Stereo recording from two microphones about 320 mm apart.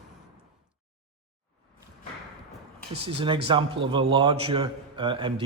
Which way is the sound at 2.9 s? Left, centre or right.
Centre.